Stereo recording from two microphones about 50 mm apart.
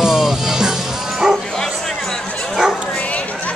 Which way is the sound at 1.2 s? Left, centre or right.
Centre.